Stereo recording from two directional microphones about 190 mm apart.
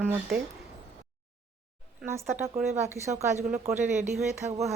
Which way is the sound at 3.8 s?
40° right (ahead or behind).